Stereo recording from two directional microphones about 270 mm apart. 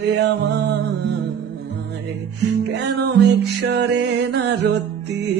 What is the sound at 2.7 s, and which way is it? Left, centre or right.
Mantra, right.